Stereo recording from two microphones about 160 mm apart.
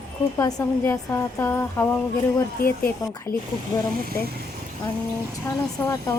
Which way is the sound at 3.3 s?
60° left (ahead or behind).